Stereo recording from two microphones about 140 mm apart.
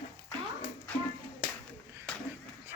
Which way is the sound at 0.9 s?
10° left (ahead or behind).